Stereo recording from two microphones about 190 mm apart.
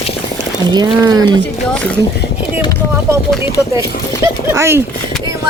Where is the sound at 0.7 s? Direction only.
20° right (ahead or behind).